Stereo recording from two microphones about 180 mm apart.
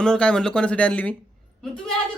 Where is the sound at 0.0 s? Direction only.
5° left (ahead or behind).